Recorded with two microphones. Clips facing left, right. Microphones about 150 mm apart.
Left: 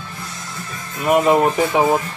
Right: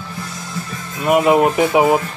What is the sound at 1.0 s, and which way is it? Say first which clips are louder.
Speech: right 1 dB; 5° right (ahead or behind).